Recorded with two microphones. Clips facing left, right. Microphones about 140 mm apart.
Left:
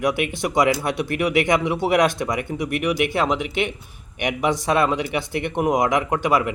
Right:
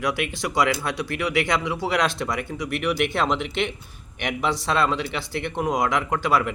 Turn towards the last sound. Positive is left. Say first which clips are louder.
# left 3 dB
turn(degrees=20)  # may be behind; listen again after turning